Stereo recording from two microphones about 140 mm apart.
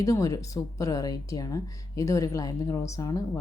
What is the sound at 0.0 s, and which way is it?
Speech, 25° left (ahead or behind).